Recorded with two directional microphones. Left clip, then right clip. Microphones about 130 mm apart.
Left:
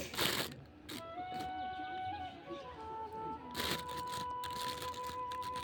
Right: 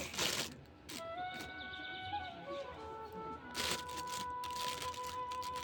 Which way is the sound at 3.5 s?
25° left (ahead or behind).